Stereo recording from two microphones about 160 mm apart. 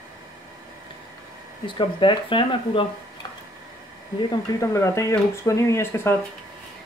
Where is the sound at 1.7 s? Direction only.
30° left (ahead or behind).